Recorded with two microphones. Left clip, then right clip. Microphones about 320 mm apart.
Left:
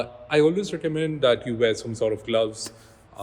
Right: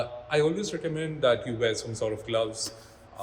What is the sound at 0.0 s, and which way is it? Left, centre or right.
A man's voice, left.